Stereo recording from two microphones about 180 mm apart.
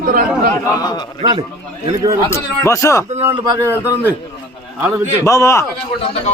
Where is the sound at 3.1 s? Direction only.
15° right (ahead or behind).